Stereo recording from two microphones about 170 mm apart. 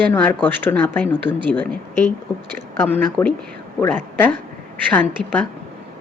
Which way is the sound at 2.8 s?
10° left (ahead or behind).